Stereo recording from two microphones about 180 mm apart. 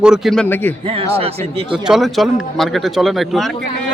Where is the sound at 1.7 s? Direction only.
Centre (ahead or behind).